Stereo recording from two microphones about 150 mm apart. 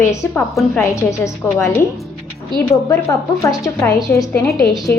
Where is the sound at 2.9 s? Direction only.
20° left (ahead or behind).